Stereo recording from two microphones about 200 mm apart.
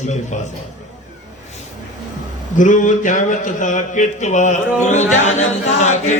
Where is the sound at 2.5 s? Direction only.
40° left (ahead or behind).